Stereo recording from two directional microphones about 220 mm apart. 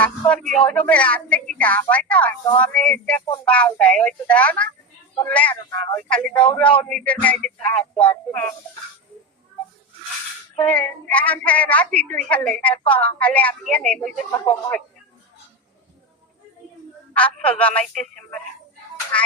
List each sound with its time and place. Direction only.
0.0 s a woman's voice: 5° left (ahead or behind)
6.3 s speech: 20° left (ahead or behind)
6.6 s a woman's voice: 5° left (ahead or behind)
10.6 s a woman's voice: 5° left (ahead or behind)
14.3 s a woman's voice: 15° left (ahead or behind)
17.2 s a woman's voice: 5° left (ahead or behind)
19.1 s speech: 5° left (ahead or behind)